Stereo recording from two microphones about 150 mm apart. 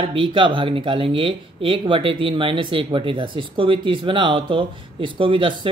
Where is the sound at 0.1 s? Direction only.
35° right (ahead or behind).